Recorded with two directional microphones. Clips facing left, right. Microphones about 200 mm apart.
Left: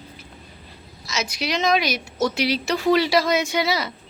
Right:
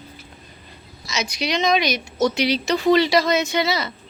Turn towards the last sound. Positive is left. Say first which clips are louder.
# right 1 dB
turn(degrees=10)  # may be behind; listen again after turning